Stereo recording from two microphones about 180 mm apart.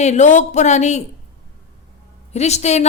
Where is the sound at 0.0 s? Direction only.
40° left (ahead or behind).